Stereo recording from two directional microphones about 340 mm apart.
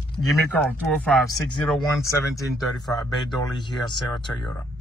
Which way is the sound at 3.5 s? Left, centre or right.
Centre.